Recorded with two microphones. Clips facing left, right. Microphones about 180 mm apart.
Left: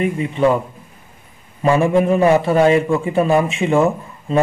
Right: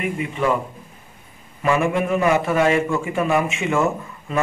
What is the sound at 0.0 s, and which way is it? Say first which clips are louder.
Speech: left 6 dB; 35° left (ahead or behind).